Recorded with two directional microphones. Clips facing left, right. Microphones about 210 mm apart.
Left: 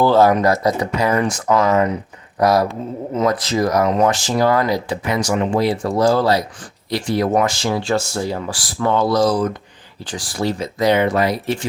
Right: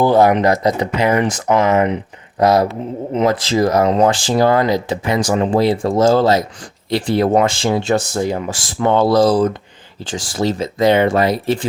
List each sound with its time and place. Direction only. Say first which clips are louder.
0.0 s speech: right 1 dB; 15° right (ahead or behind)